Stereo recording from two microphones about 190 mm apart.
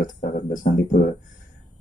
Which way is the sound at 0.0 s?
45° left (ahead or behind).